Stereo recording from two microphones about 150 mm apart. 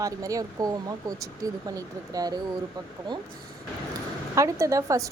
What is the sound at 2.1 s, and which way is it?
Speech, 25° right (ahead or behind).